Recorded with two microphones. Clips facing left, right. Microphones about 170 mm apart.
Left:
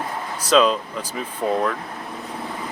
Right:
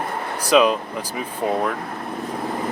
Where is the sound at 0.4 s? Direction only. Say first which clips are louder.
Right 1 dB; 15° right (ahead or behind).